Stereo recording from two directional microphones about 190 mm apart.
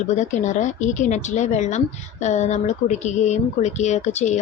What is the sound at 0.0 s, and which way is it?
Speech, 40° left (ahead or behind).